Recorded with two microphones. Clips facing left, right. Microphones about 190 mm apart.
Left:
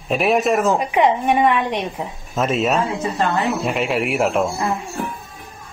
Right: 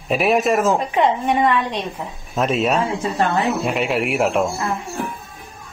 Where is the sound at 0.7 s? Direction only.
15° left (ahead or behind).